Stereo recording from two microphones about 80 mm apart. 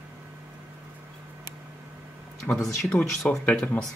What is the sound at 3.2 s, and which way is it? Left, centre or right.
Speech, centre.